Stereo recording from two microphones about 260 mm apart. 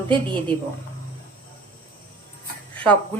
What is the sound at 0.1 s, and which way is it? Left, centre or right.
Speech, centre.